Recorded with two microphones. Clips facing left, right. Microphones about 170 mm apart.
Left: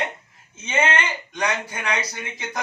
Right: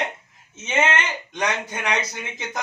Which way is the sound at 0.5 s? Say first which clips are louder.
Even; 20° right (ahead or behind).